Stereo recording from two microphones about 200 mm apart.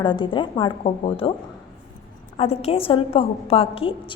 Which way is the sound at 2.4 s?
30° left (ahead or behind).